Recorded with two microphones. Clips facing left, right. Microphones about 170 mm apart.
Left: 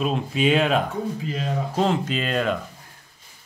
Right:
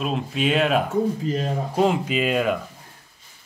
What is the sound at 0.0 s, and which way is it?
Speech, centre (ahead or behind).